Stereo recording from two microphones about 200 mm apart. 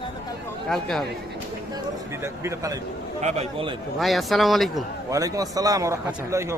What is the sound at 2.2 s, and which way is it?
Speech, 15° right (ahead or behind).